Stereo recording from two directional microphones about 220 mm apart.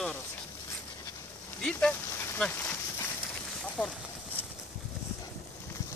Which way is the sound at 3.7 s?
5° left (ahead or behind).